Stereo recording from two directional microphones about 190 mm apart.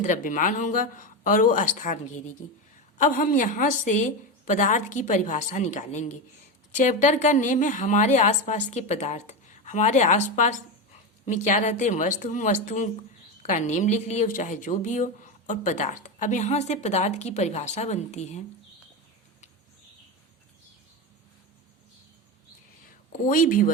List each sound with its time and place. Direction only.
0.0 s a woman's voice: 40° left (ahead or behind)
23.2 s speech: 45° left (ahead or behind)